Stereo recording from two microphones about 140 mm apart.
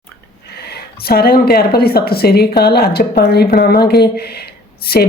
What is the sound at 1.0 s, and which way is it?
A woman's voice, 90° left.